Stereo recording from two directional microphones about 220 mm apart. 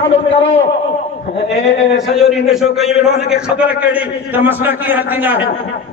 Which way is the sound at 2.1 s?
Centre (ahead or behind).